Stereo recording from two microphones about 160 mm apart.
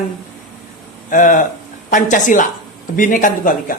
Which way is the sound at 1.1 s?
55° left (ahead or behind).